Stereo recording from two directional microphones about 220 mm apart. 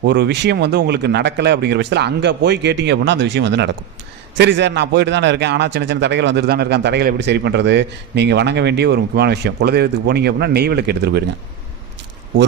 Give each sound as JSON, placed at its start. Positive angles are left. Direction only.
{"t": 0.0, "sound": "a man's voice", "side_deg": -50}